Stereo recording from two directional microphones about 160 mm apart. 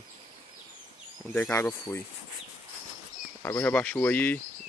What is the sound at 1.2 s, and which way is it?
Speech, 10° left (ahead or behind).